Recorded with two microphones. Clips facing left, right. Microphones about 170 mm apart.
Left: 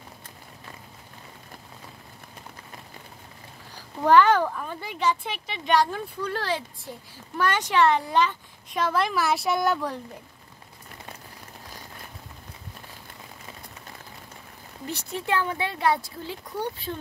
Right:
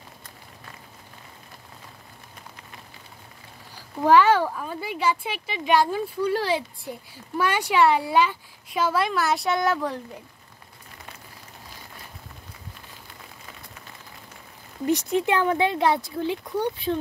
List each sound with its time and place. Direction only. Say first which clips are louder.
4.0 s speech: right 1 dB; 5° right (ahead or behind)
14.9 s speech: right 7 dB; 20° right (ahead or behind)